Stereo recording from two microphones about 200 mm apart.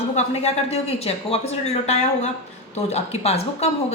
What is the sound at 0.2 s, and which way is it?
Speech, 30° left (ahead or behind).